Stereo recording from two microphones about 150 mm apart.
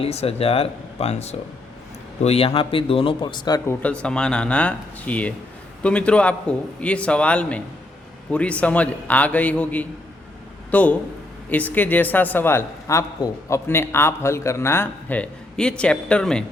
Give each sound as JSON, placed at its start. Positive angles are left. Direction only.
{"t": 0.0, "sound": "speech", "side_deg": 40}
{"t": 3.8, "sound": "speech", "side_deg": 5}